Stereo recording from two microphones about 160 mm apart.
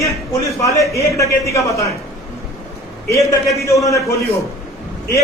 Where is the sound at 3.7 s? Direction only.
20° left (ahead or behind).